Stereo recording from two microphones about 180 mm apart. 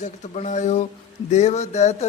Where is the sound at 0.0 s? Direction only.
40° left (ahead or behind).